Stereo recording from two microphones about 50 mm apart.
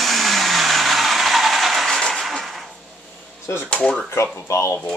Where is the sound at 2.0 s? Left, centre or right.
Centre.